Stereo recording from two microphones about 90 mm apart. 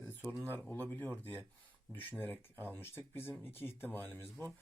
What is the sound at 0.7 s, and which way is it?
Speech, 20° left (ahead or behind).